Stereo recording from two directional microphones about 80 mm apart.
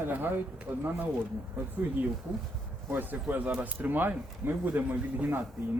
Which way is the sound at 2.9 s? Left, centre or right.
Right.